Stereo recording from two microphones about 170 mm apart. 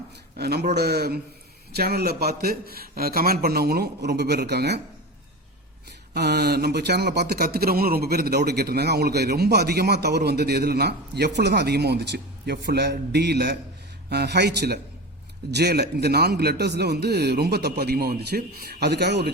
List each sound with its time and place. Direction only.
0.3 s speech: 70° right (ahead or behind)
6.1 s speech: 75° right (ahead or behind)